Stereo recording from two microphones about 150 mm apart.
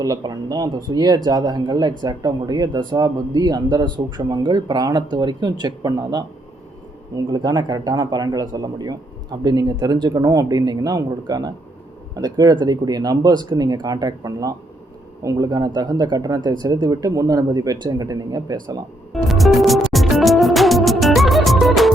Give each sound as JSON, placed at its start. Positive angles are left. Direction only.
{"t": 0.0, "sound": "speech", "side_deg": -25}
{"t": 7.3, "sound": "speech", "side_deg": -25}
{"t": 19.1, "sound": "music", "side_deg": 0}